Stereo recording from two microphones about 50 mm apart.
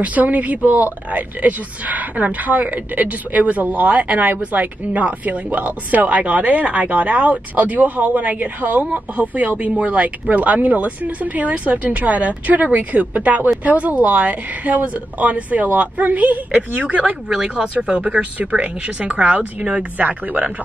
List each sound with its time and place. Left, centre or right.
0.0 s a woman's voice: right